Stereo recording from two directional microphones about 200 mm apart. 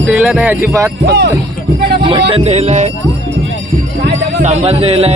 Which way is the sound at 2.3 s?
30° right (ahead or behind).